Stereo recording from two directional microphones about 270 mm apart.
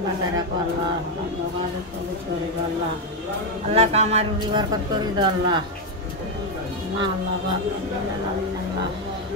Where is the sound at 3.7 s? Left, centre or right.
Right.